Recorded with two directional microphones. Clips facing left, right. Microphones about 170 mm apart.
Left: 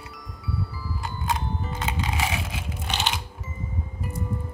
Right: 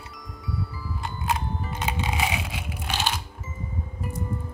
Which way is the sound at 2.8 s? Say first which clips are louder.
Even; 10° right (ahead or behind).